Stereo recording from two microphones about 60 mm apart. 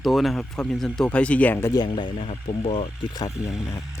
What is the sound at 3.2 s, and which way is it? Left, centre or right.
Speech, left.